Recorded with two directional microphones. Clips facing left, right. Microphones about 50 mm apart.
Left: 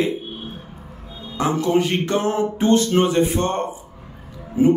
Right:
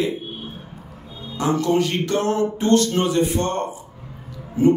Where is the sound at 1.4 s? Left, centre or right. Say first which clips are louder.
Left 1 dB; left.